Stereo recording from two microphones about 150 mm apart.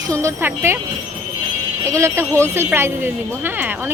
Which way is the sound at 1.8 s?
20° right (ahead or behind).